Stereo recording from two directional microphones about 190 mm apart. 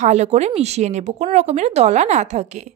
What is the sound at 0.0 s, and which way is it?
Speech, 35° right (ahead or behind).